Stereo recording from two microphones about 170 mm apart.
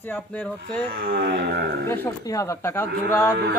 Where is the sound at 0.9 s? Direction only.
60° right (ahead or behind).